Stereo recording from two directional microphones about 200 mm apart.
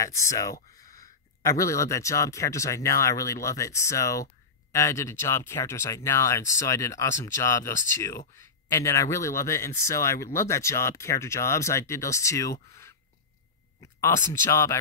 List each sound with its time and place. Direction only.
0.0 s speech: 15° left (ahead or behind)